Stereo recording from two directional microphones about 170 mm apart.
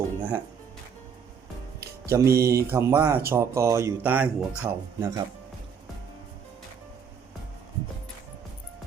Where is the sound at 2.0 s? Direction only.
15° right (ahead or behind).